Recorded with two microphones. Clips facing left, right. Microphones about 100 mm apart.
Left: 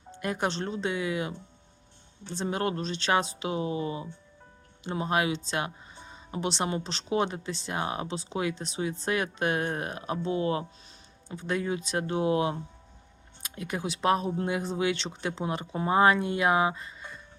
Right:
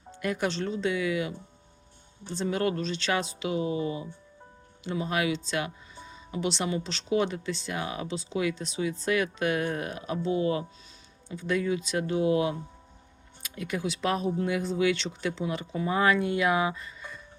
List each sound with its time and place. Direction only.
0.2 s speech: 25° left (ahead or behind)
2.4 s speech: 30° left (ahead or behind)